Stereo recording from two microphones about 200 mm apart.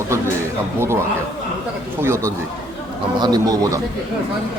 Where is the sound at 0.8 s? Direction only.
15° right (ahead or behind).